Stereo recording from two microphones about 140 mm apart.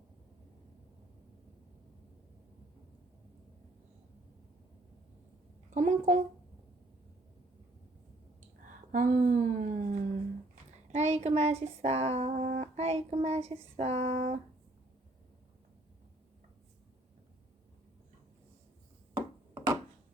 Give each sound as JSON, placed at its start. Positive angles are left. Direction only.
{"t": 5.7, "sound": "a woman's voice", "side_deg": -60}
{"t": 8.6, "sound": "speech", "side_deg": -70}
{"t": 19.1, "sound": "a sound", "side_deg": -25}